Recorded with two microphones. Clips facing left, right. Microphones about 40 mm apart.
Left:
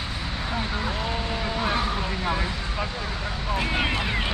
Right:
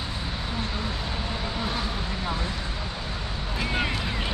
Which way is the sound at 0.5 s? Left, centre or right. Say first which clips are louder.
Left 4 dB; centre.